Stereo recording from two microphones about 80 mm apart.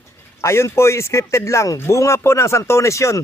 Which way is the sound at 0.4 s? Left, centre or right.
Left.